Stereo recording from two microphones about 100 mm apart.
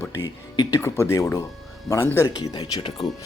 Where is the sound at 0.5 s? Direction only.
45° left (ahead or behind).